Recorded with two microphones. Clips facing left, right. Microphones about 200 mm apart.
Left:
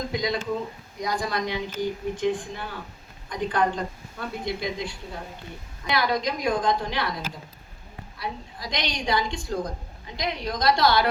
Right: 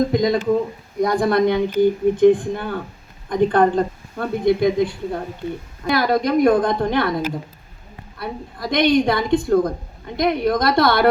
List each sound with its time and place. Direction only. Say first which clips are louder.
0.1 s a woman's voice: right 10 dB; 50° right (ahead or behind)